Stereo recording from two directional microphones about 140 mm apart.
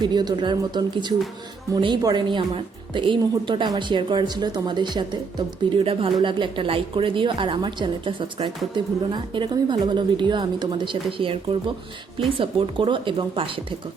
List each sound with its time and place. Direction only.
0.0 s a woman's voice: 30° right (ahead or behind)
12.4 s a woman's voice: 40° right (ahead or behind)